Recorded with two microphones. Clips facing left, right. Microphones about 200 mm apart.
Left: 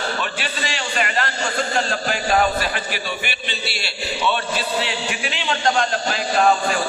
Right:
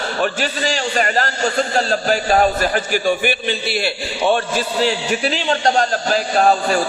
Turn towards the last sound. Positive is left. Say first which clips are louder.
# right 3 dB
turn(degrees=-40)  # may be behind; listen again after turning